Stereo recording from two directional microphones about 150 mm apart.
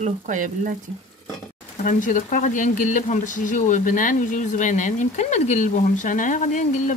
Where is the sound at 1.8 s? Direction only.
60° left (ahead or behind).